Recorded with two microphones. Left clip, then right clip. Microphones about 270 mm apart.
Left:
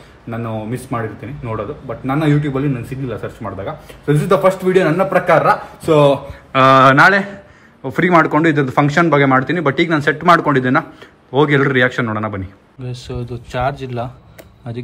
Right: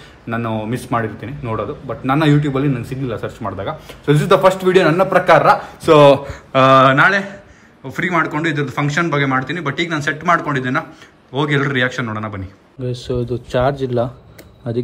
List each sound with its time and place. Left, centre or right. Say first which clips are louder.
0.3 s speech: right 3 dB; centre
5.9 s speech: right 3 dB; right
6.5 s speech: left 1 dB; centre
13.2 s speech: right 2 dB; left